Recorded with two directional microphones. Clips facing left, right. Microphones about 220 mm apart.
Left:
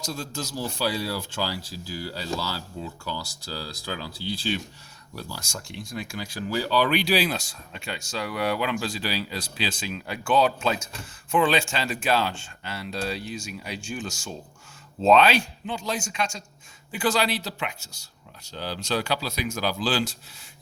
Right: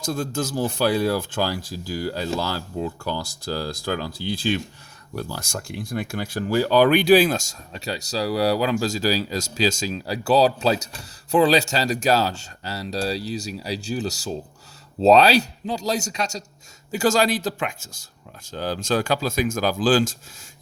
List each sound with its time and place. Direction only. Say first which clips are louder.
0.0 s speech: right 7 dB; 50° right (ahead or behind)